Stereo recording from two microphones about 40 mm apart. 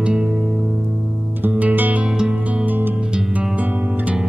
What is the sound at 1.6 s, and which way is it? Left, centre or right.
Music, right.